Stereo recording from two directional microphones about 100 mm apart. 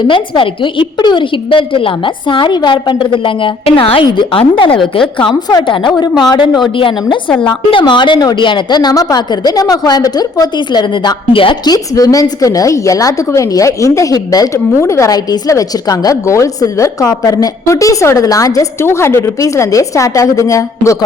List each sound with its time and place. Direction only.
0.0 s a woman's voice: 60° left (ahead or behind)
4.0 s a woman's voice: 50° left (ahead or behind)
11.7 s a woman's voice: 40° left (ahead or behind)